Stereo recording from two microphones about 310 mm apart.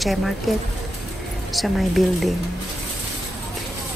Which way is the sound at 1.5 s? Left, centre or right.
Centre.